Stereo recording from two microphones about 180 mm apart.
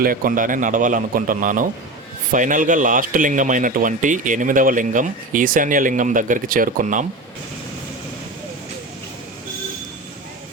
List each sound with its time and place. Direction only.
0.0 s speech: 50° right (ahead or behind)